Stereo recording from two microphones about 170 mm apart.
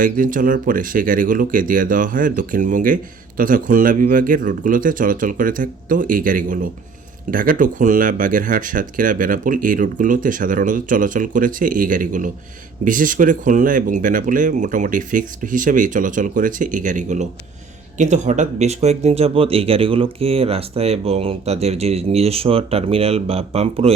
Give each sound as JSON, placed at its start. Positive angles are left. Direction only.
{"t": 0.0, "sound": "speech", "side_deg": -55}